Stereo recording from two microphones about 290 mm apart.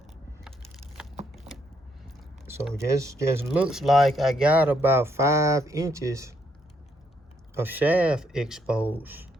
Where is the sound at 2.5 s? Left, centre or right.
Centre.